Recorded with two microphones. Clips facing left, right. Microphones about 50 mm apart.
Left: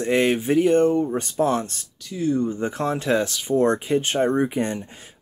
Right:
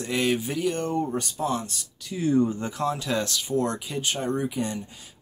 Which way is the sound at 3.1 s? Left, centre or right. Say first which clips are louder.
Left 5 dB; centre.